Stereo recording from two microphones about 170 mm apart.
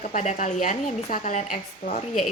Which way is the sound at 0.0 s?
45° left (ahead or behind).